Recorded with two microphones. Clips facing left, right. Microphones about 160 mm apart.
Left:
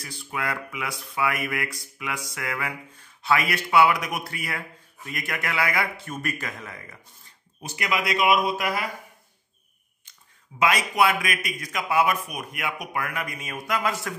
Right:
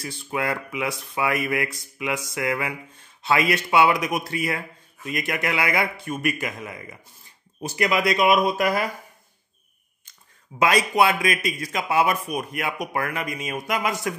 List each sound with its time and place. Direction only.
0.0 s speech: 25° right (ahead or behind)
7.6 s speech: 40° right (ahead or behind)
10.6 s speech: 30° right (ahead or behind)
13.2 s speech: 20° right (ahead or behind)